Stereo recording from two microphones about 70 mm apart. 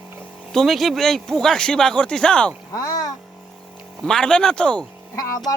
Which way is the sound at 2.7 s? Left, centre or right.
Left.